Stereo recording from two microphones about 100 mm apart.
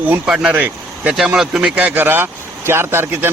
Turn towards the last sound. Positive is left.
turn(degrees=-25)  # may be behind; listen again after turning